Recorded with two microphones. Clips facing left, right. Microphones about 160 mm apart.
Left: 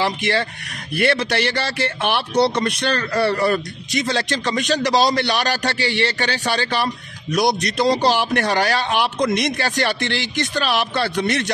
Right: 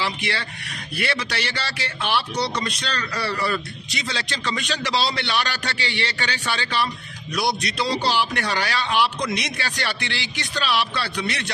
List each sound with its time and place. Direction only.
0.0 s speech: 45° left (ahead or behind)